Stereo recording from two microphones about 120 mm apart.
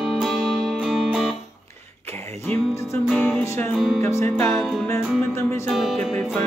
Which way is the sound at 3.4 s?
20° left (ahead or behind).